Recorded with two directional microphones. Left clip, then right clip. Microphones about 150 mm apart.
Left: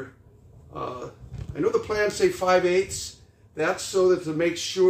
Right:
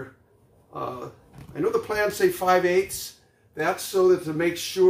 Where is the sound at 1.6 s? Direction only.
15° right (ahead or behind).